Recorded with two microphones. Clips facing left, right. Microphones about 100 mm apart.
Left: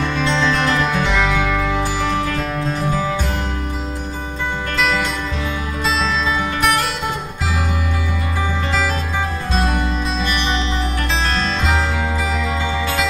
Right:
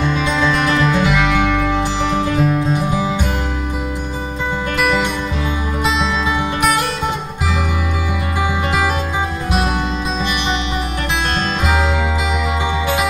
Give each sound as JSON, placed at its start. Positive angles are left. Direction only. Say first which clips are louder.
{"t": 0.0, "sound": "music", "louder": "right 1 dB", "side_deg": -10}
{"t": 4.7, "sound": "music", "louder": "right 2 dB", "side_deg": -10}
{"t": 9.5, "sound": "music", "louder": "right 1 dB", "side_deg": -10}